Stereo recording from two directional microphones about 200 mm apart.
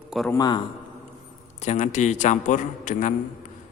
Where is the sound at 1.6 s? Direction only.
35° left (ahead or behind).